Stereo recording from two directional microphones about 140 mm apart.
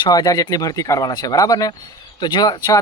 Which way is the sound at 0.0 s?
30° left (ahead or behind).